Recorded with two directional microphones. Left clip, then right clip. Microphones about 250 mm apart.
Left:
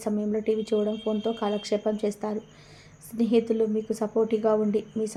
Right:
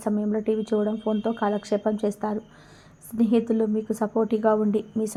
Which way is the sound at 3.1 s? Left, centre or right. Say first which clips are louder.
Right 1 dB; centre.